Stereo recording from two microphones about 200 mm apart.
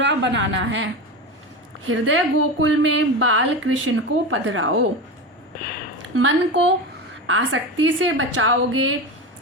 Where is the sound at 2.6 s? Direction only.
70° right (ahead or behind).